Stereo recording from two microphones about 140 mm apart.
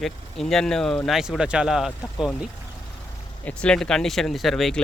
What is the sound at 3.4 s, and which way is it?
Speech, 5° left (ahead or behind).